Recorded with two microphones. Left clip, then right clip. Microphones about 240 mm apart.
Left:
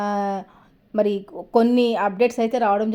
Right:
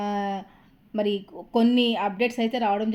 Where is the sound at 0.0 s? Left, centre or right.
Left.